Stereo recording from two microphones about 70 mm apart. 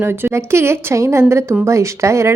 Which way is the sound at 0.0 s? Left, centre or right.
Right.